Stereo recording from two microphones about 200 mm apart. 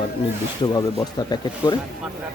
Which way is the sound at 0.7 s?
20° left (ahead or behind).